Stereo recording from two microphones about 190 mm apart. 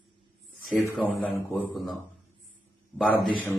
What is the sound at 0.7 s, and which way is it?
Speech, 5° right (ahead or behind).